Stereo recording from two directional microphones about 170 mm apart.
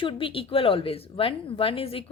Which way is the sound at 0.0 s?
30° left (ahead or behind).